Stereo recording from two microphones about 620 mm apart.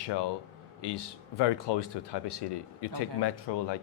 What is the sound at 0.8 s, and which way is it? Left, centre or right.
Speech, left.